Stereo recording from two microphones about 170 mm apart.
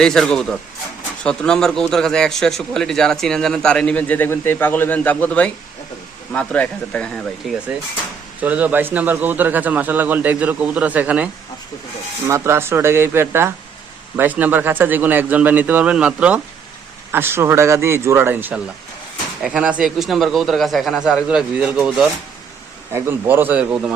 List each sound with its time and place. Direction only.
0.0 s a man's voice: 5° left (ahead or behind)
8.4 s speech: 10° right (ahead or behind)
12.3 s a man's voice: 15° right (ahead or behind)
22.9 s speech: 15° right (ahead or behind)